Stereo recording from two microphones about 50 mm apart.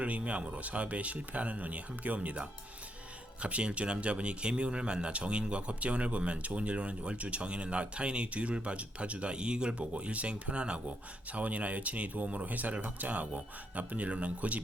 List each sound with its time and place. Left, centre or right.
0.0 s a man's voice: right